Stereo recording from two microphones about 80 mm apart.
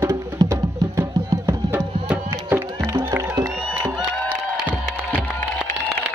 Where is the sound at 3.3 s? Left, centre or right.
Right.